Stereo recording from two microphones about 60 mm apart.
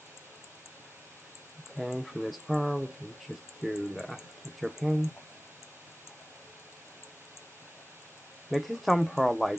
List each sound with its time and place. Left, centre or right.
1.8 s speech: centre
8.5 s speech: centre